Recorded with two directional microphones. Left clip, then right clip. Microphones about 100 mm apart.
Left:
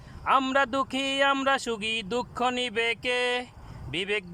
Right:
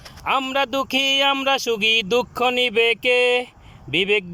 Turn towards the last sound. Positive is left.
turn(degrees=-30)  # may be behind; listen again after turning